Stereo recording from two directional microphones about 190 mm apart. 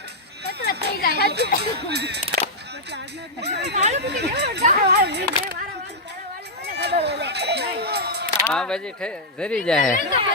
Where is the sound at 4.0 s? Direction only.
60° right (ahead or behind).